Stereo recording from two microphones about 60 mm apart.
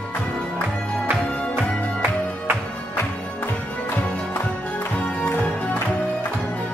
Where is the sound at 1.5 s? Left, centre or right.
Right.